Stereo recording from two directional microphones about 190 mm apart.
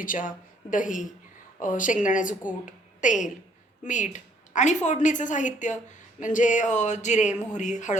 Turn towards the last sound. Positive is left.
turn(degrees=40)  # may be behind; listen again after turning